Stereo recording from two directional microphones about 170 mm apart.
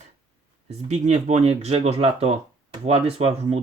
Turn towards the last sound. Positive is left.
turn(degrees=-35)  # may be behind; listen again after turning